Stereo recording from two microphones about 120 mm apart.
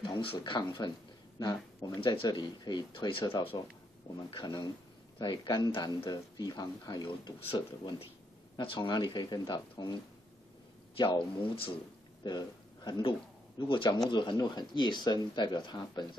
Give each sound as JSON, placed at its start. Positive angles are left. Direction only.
{"t": 0.0, "sound": "speech", "side_deg": 45}
{"t": 2.0, "sound": "speech", "side_deg": 45}
{"t": 3.5, "sound": "speech", "side_deg": 35}
{"t": 11.0, "sound": "speech", "side_deg": 40}
{"t": 12.2, "sound": "a sound", "side_deg": 35}
{"t": 13.6, "sound": "speech", "side_deg": 45}